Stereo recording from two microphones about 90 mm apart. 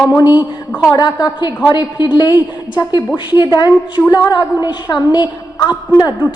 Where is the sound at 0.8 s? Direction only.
55° left (ahead or behind).